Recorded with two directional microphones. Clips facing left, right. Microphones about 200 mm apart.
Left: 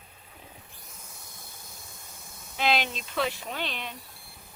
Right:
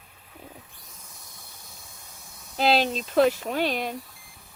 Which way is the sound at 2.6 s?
35° right (ahead or behind).